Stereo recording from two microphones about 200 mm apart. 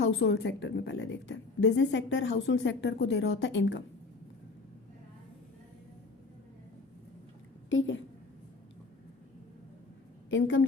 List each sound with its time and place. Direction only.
0.0 s a woman's voice: 60° left (ahead or behind)
7.7 s a woman's voice: 70° left (ahead or behind)
10.2 s a woman's voice: 70° left (ahead or behind)